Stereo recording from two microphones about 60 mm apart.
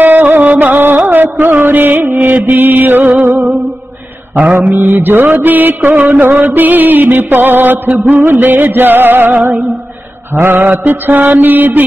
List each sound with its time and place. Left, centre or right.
0.0 s music: right
4.8 s music: right